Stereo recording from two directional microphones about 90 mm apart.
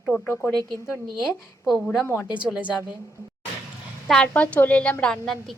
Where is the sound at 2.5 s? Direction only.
15° right (ahead or behind).